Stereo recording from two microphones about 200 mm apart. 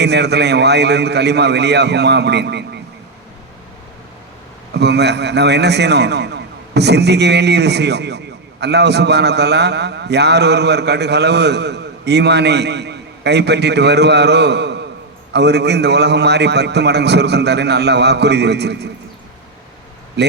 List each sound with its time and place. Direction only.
0.0 s a man's voice: 55° right (ahead or behind)
4.7 s a man's voice: 55° right (ahead or behind)
20.2 s a man's voice: 60° right (ahead or behind)